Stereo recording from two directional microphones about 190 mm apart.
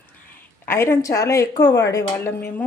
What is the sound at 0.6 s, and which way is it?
Speech, 10° left (ahead or behind).